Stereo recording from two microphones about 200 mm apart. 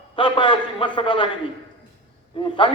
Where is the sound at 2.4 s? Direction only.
25° left (ahead or behind).